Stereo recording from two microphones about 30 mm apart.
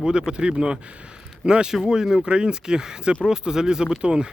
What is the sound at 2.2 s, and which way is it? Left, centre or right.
Speech, right.